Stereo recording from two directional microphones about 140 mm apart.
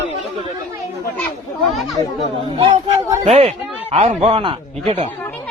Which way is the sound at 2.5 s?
35° right (ahead or behind).